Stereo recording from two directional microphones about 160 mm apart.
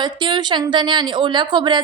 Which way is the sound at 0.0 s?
30° right (ahead or behind).